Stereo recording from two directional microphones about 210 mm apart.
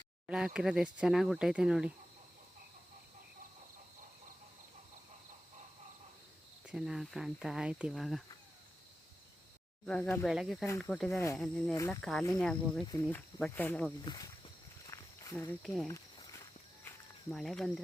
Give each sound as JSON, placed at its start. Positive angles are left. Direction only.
{"t": 0.3, "sound": "speech", "side_deg": -5}
{"t": 6.7, "sound": "speech", "side_deg": 0}
{"t": 9.8, "sound": "speech", "side_deg": 5}
{"t": 12.8, "sound": "speech", "side_deg": 15}
{"t": 14.0, "sound": "speech", "side_deg": 20}
{"t": 14.8, "sound": "walk", "side_deg": 15}
{"t": 17.3, "sound": "speech", "side_deg": 0}